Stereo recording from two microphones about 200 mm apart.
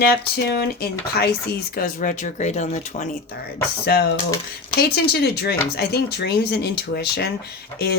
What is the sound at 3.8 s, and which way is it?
A woman's voice, 55° left (ahead or behind).